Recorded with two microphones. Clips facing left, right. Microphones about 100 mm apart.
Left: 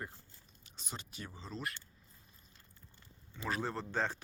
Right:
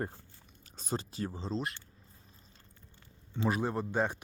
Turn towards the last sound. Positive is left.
turn(degrees=-15)  # may be behind; listen again after turning